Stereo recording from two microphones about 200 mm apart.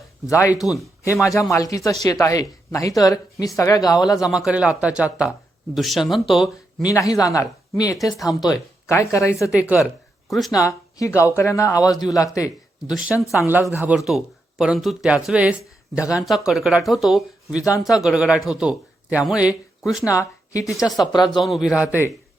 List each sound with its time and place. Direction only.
0.3 s speech: 15° left (ahead or behind)
4.2 s a man's voice: centre (ahead or behind)
6.8 s speech: 15° left (ahead or behind)
9.5 s speech: 5° right (ahead or behind)
10.5 s speech: 15° left (ahead or behind)
13.4 s a man's voice: 10° right (ahead or behind)
20.1 s speech: 15° left (ahead or behind)
21.4 s a man's voice: centre (ahead or behind)